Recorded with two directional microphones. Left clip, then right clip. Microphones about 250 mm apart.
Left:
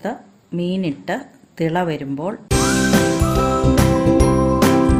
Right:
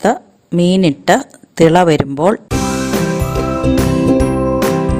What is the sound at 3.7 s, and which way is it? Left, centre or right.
Music, centre.